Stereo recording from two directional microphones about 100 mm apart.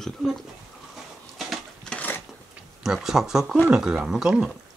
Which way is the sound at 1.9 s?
15° left (ahead or behind).